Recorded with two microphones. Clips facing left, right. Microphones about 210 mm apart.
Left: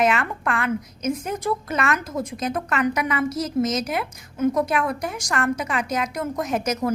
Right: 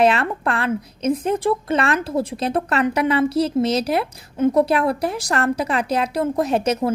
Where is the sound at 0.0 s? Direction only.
35° right (ahead or behind).